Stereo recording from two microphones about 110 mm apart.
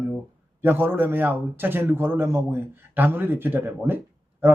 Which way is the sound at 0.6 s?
20° right (ahead or behind).